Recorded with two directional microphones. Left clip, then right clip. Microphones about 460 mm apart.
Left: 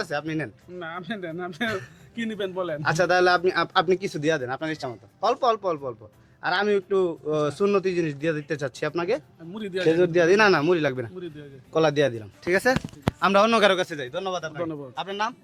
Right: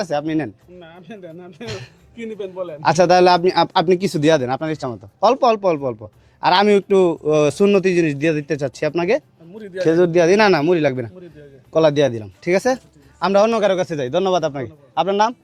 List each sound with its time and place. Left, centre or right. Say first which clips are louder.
0.0 s speech: right 7 dB; right
0.8 s a man's voice: left 8 dB; left
2.8 s speech: right 8 dB; right; by 13.7 s centre
14.1 s a man's voice: right 12 dB; right